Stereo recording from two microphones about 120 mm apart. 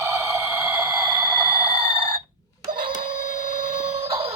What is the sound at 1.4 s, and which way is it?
Chicken, 50° right (ahead or behind).